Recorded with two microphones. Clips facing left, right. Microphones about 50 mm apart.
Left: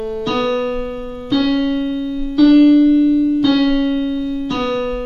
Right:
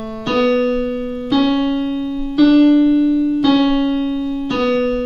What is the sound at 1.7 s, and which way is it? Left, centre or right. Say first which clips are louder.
Keyboard: even; centre.